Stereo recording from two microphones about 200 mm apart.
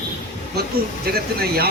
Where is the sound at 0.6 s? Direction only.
50° right (ahead or behind).